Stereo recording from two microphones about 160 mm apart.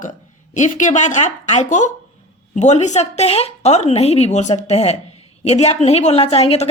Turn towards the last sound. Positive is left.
turn(degrees=40)  # may be behind; listen again after turning